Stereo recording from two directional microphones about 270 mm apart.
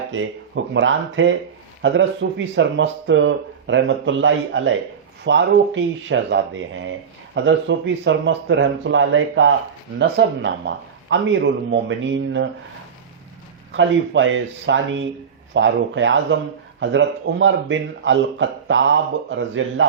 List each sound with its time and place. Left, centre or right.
0.1 s a man's voice: right
13.7 s a man's voice: right